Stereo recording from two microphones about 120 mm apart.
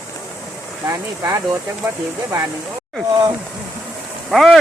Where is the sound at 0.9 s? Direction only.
25° right (ahead or behind).